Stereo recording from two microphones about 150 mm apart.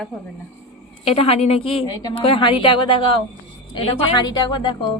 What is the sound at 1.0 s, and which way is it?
A woman's voice, 40° left (ahead or behind).